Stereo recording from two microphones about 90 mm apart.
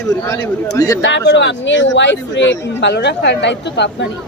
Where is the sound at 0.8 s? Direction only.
40° left (ahead or behind).